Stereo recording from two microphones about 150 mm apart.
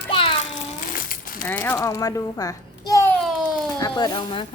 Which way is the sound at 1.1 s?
75° left (ahead or behind).